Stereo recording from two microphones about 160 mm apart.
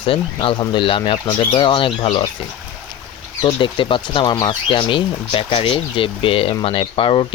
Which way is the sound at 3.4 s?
30° left (ahead or behind).